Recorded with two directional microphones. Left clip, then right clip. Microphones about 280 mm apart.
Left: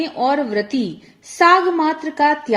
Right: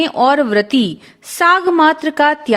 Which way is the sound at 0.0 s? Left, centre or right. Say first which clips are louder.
Right 6 dB; right.